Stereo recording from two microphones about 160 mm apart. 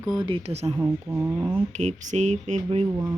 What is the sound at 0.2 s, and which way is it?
Speech, 35° right (ahead or behind).